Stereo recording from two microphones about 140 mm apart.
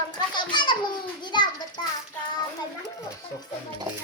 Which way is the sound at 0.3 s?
35° left (ahead or behind).